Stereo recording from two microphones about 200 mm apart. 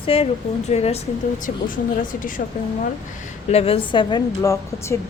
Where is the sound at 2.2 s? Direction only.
40° left (ahead or behind).